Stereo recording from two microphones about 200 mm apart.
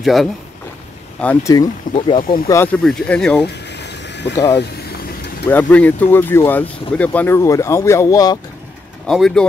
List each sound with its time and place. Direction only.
0.0 s a man's voice: centre (ahead or behind)
1.2 s speech: 15° left (ahead or behind)
2.4 s speech: 10° left (ahead or behind)
3.4 s a sound: 60° left (ahead or behind)
5.5 s speech: 10° left (ahead or behind)
9.0 s speech: centre (ahead or behind)